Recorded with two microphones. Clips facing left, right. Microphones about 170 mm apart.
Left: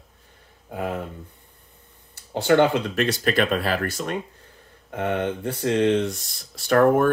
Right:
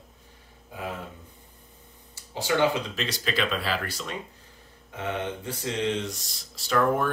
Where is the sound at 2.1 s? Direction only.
60° left (ahead or behind).